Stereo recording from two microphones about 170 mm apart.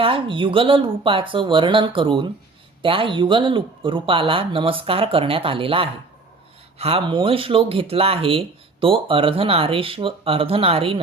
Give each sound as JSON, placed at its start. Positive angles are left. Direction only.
{"t": 0.0, "sound": "speech", "side_deg": -30}